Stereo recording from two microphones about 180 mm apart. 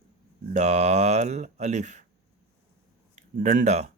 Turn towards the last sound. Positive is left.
turn(degrees=-40)  # may be behind; listen again after turning